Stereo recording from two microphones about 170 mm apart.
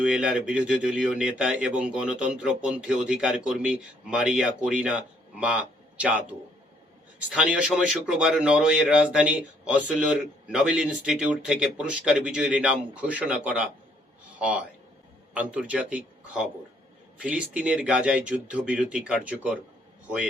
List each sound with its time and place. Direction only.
0.0 s speech: 5° right (ahead or behind)